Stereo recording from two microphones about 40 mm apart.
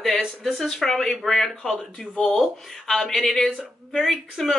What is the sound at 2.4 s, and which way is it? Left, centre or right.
Speech, centre.